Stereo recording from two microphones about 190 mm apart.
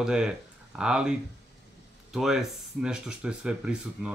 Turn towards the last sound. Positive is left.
turn(degrees=-5)  # may be behind; listen again after turning